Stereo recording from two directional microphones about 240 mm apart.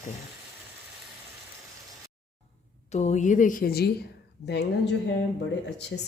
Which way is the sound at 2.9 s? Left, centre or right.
Left.